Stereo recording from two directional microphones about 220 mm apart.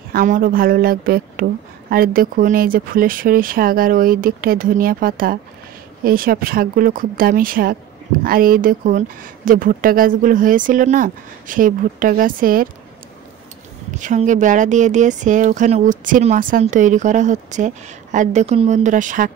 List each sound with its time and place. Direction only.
0.1 s speech: 40° right (ahead or behind)
13.9 s speech: 35° right (ahead or behind)